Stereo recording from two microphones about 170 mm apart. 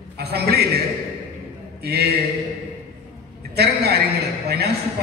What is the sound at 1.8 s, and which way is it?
Speech, 70° right (ahead or behind).